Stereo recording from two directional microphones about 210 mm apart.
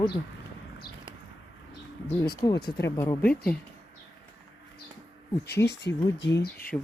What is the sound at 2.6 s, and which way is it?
Speech, 50° left (ahead or behind).